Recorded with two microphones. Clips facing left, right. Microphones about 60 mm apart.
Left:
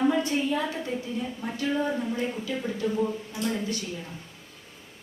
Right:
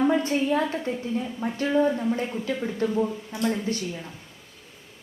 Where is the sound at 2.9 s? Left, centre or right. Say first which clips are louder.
Right 2 dB; right.